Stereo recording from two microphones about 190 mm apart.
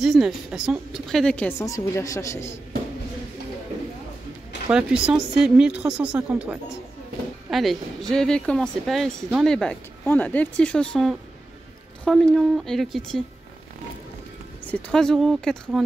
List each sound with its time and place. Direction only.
0.0 s speech: centre (ahead or behind); by 2.6 s 15° left (ahead or behind)
4.7 s speech: 5° right (ahead or behind)
14.7 s speech: 5° left (ahead or behind)